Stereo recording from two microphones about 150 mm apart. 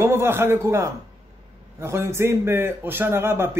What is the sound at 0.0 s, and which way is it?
Speech, 15° right (ahead or behind).